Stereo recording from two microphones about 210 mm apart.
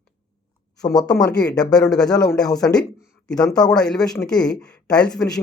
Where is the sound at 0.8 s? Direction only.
20° left (ahead or behind).